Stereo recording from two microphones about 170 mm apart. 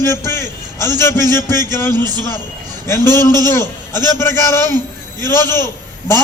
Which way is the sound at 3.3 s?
15° left (ahead or behind).